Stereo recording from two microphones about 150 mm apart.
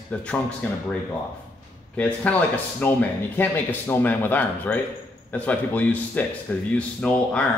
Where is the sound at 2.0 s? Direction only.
10° left (ahead or behind).